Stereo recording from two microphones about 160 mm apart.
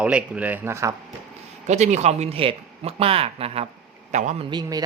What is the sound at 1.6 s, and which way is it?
A man's voice, 45° right (ahead or behind).